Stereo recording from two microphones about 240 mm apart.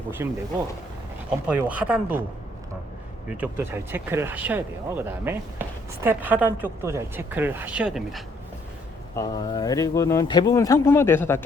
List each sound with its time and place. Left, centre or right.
0.2 s speech: centre
1.5 s speech: centre
3.4 s speech: centre
9.1 s speech: centre